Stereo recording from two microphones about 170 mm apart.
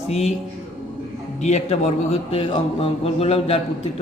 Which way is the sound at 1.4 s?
40° left (ahead or behind).